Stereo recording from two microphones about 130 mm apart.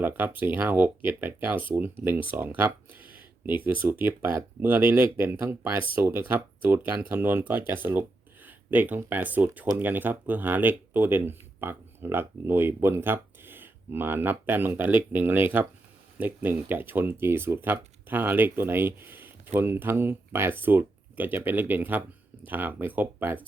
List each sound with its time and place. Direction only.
0.0 s speech: 15° right (ahead or behind)